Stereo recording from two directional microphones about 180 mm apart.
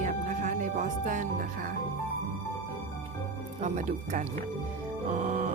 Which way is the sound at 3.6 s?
40° right (ahead or behind).